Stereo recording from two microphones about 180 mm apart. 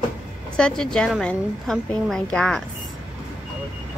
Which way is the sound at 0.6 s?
5° left (ahead or behind).